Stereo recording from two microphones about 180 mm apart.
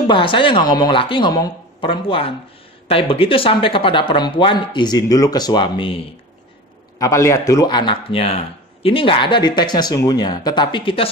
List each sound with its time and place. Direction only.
0.0 s speech: 30° left (ahead or behind)
7.0 s speech: 15° left (ahead or behind)